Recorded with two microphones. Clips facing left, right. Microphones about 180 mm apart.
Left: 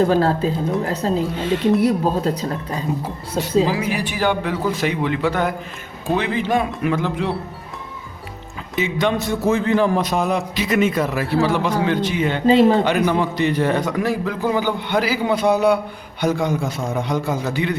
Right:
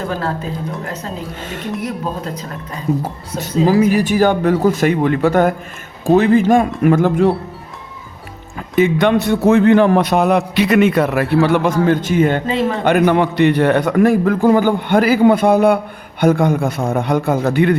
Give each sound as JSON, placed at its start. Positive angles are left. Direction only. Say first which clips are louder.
{"t": 0.0, "sound": "a woman's voice", "louder": "left 6 dB", "side_deg": 30}
{"t": 1.4, "sound": "a man's voice", "louder": "left 7 dB", "side_deg": -45}
{"t": 1.8, "sound": "a woman's voice", "louder": "left 5 dB", "side_deg": 35}
{"t": 3.7, "sound": "a man's voice", "louder": "right 9 dB", "side_deg": -45}
{"t": 8.5, "sound": "a man's voice", "louder": "right 9 dB", "side_deg": -55}
{"t": 12.5, "sound": "a woman's voice", "louder": "left 5 dB", "side_deg": 30}
{"t": 12.8, "sound": "a man's voice", "louder": "right 5 dB", "side_deg": -55}